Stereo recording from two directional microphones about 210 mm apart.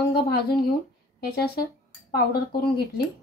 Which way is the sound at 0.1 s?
50° left (ahead or behind).